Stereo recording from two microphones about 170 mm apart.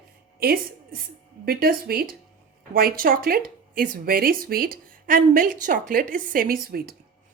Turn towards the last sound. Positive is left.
turn(degrees=-60)  # may be behind; listen again after turning